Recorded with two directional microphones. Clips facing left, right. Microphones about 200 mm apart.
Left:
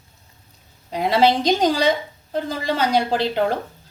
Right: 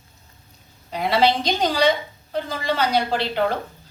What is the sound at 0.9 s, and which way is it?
A woman's voice, 45° left (ahead or behind).